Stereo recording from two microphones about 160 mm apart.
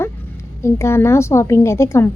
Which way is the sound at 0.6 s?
15° left (ahead or behind).